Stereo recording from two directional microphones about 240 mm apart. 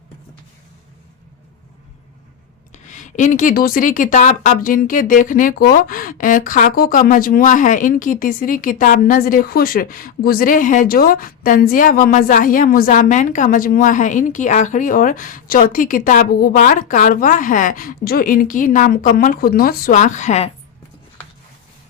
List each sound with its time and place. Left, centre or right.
2.7 s a woman's voice: left